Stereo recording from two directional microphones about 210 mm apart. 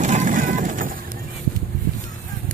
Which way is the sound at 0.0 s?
35° right (ahead or behind).